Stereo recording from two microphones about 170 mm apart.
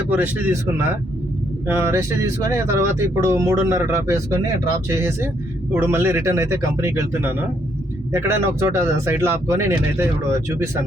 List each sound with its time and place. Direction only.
0.1 s speech: 10° right (ahead or behind)